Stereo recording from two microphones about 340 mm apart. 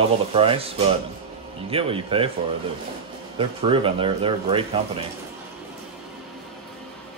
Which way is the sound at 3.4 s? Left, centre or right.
Centre.